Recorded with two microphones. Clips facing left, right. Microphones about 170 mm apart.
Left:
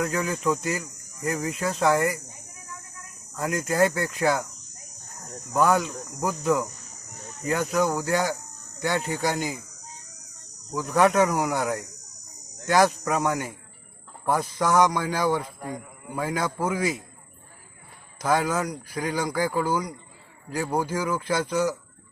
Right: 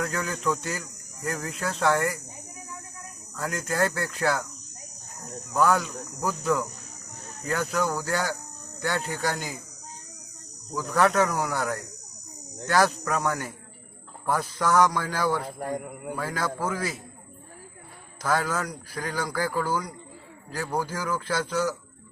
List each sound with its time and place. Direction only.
0.0 s speech: 5° left (ahead or behind)
3.3 s speech: 10° left (ahead or behind)
5.5 s speech: 10° left (ahead or behind)
10.8 s speech: 15° left (ahead or behind)
15.4 s a man's voice: 55° right (ahead or behind)
16.1 s speech: 15° left (ahead or behind)
18.2 s speech: 15° left (ahead or behind)